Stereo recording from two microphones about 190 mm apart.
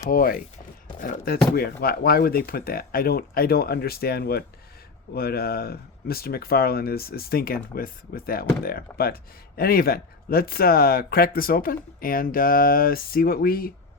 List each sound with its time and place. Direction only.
0.1 s speech: 45° left (ahead or behind)